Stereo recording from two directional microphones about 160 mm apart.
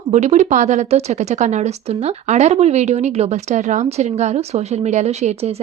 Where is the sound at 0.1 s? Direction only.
45° right (ahead or behind).